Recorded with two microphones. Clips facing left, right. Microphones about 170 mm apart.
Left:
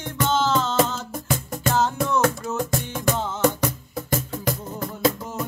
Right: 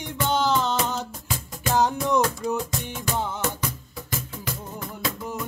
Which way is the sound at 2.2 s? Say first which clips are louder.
Left 3 dB; 50° left (ahead or behind).